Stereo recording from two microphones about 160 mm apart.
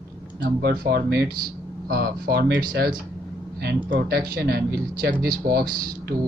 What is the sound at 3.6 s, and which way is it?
Speech, 85° right.